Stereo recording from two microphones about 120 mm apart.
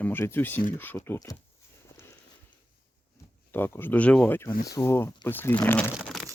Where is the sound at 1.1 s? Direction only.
30° left (ahead or behind).